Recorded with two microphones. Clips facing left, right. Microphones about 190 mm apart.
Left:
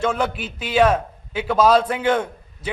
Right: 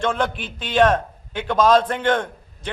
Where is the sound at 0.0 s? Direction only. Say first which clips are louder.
Left 1 dB; 5° left (ahead or behind).